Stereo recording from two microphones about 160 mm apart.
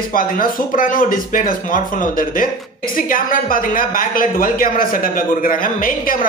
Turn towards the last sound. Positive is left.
turn(degrees=60)  # may be behind; listen again after turning